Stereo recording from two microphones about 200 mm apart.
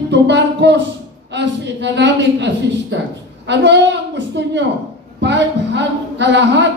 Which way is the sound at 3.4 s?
60° right (ahead or behind).